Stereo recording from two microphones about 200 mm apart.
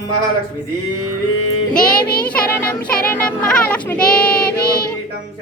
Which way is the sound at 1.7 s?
45° left (ahead or behind).